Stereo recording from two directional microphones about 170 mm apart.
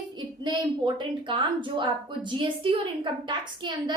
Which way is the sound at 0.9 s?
30° right (ahead or behind).